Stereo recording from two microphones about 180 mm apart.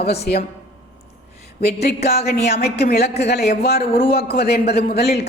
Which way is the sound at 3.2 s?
65° left (ahead or behind).